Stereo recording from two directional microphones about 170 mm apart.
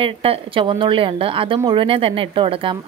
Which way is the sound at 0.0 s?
35° right (ahead or behind).